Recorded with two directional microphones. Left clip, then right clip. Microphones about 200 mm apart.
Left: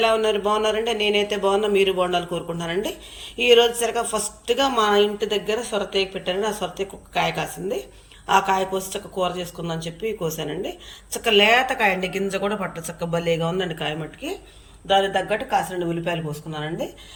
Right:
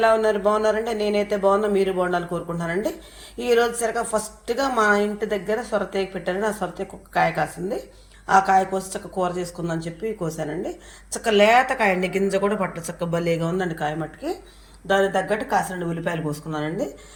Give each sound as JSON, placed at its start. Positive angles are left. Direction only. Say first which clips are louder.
{"t": 0.0, "sound": "a man's voice", "louder": "right 1 dB", "side_deg": -5}